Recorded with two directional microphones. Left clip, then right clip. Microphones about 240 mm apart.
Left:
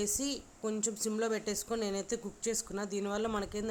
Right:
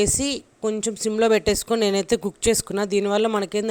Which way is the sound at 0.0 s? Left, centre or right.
Right.